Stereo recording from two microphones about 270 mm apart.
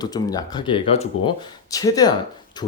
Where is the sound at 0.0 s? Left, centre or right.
Centre.